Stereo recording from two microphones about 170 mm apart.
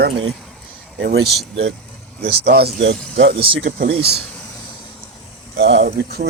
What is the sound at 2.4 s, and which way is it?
Speech, 70° right (ahead or behind).